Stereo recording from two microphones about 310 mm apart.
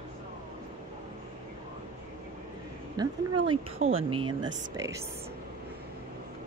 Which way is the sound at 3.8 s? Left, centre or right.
Right.